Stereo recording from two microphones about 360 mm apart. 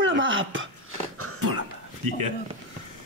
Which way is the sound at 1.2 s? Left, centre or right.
Right.